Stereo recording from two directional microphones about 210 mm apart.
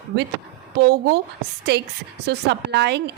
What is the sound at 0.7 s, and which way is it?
A woman's voice, 50° right (ahead or behind).